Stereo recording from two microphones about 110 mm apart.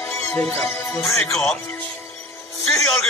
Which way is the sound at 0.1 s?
20° left (ahead or behind).